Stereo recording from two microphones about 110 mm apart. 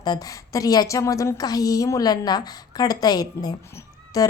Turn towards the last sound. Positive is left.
turn(degrees=35)  # may be behind; listen again after turning